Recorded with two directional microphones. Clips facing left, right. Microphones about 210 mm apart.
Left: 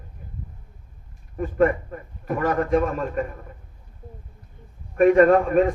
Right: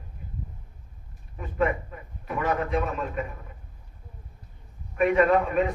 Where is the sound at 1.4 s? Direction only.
45° left (ahead or behind).